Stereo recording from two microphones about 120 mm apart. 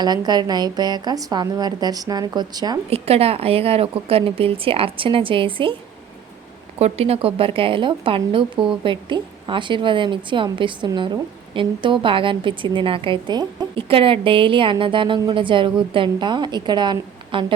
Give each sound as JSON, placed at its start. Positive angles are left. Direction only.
{"t": 0.0, "sound": "a woman's voice", "side_deg": -35}
{"t": 2.9, "sound": "a woman's voice", "side_deg": -55}
{"t": 6.7, "sound": "a woman's voice", "side_deg": -60}
{"t": 13.7, "sound": "a woman's voice", "side_deg": -50}